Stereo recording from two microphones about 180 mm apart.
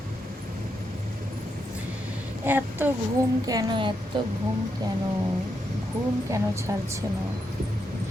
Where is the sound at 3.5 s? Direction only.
20° right (ahead or behind).